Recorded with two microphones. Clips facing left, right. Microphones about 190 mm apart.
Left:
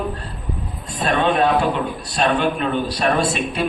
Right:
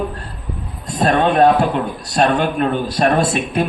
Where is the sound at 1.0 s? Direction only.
45° right (ahead or behind).